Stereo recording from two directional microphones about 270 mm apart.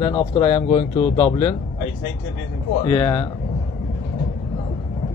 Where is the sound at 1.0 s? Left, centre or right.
Centre.